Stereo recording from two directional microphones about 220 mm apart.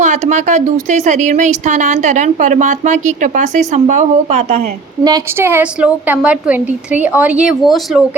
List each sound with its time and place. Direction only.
0.0 s speech: 35° right (ahead or behind)
5.0 s a woman's voice: 15° right (ahead or behind)